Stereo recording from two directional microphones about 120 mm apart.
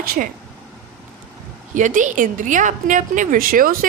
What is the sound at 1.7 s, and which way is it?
A woman's voice, 90° right.